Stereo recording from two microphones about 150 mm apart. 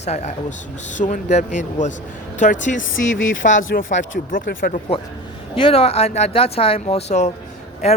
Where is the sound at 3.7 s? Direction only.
70° left (ahead or behind).